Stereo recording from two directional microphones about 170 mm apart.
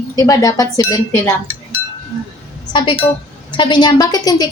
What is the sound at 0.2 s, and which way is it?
Speech, 20° left (ahead or behind).